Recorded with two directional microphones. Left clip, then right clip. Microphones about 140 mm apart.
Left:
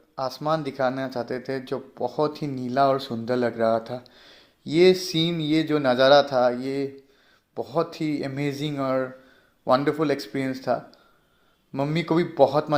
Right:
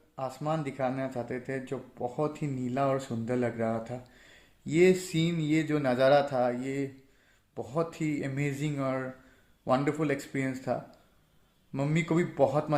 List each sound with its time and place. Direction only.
0.2 s speech: 30° left (ahead or behind)